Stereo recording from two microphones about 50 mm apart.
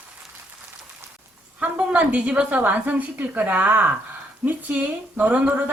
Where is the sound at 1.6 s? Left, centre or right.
Right.